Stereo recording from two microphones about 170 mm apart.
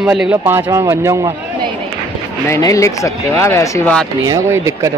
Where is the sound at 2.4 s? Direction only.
15° left (ahead or behind).